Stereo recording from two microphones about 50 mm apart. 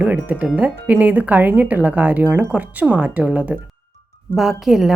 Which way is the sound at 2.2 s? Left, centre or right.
Right.